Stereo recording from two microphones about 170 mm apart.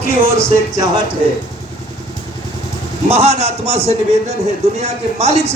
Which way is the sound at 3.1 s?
40° right (ahead or behind).